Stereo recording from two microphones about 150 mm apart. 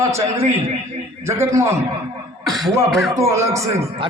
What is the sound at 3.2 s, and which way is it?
Speech, 20° right (ahead or behind).